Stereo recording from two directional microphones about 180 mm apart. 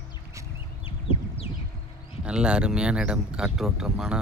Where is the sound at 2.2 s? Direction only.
5° right (ahead or behind).